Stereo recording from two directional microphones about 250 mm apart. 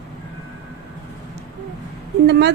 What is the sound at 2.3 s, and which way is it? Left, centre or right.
Speech, right.